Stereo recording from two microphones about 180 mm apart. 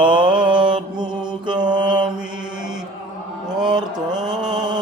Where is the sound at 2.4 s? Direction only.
5° right (ahead or behind).